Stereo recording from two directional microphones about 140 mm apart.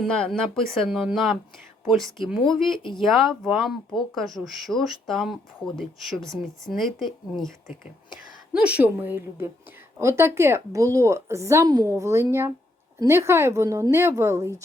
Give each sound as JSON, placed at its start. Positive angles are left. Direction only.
{"t": 0.0, "sound": "speech", "side_deg": 5}
{"t": 8.5, "sound": "a woman's voice", "side_deg": -10}